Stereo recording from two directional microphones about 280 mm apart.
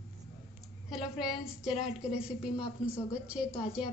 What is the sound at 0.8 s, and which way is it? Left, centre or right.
A woman's voice, centre.